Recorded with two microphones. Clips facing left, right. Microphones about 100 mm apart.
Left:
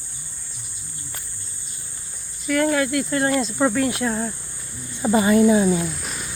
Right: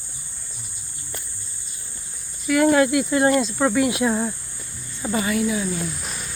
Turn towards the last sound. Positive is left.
turn(degrees=0)  # may be behind; listen again after turning